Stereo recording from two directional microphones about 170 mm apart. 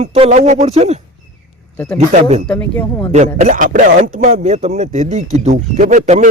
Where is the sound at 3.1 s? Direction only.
45° right (ahead or behind).